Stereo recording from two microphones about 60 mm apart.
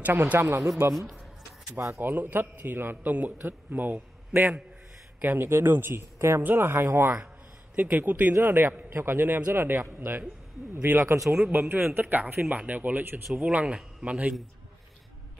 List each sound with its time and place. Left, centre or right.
0.0 s a man's voice: right
5.2 s a man's voice: right
7.7 s a man's voice: right
11.0 s speech: right
11.2 s speech: centre
11.7 s a man's voice: right